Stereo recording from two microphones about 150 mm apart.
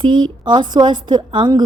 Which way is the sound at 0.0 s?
30° right (ahead or behind).